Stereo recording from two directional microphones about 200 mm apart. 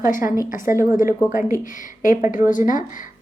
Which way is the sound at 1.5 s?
45° left (ahead or behind).